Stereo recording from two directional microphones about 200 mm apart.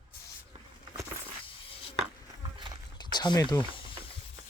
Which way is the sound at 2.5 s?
25° right (ahead or behind).